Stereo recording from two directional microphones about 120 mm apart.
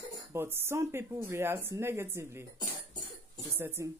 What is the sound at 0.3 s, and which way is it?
Speech, 20° right (ahead or behind).